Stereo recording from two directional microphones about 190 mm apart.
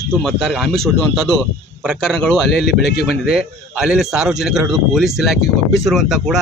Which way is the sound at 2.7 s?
60° left (ahead or behind).